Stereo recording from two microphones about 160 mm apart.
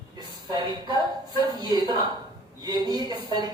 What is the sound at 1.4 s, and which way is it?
Speech, 25° right (ahead or behind).